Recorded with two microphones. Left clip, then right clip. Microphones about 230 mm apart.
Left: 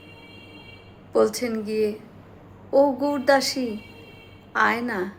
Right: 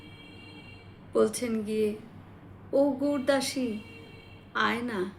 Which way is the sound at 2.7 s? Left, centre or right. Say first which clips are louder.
Left 6 dB; centre.